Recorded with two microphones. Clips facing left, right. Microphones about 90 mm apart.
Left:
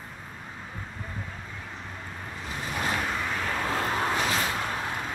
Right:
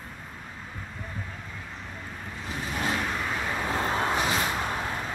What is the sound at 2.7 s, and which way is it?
Vehicle, centre (ahead or behind).